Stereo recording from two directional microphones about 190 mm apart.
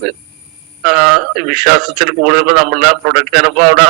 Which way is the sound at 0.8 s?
Centre (ahead or behind).